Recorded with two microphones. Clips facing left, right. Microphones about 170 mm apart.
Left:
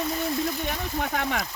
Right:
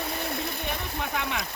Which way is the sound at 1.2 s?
50° left (ahead or behind).